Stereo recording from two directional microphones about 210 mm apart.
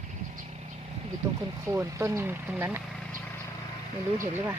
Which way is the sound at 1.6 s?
10° right (ahead or behind).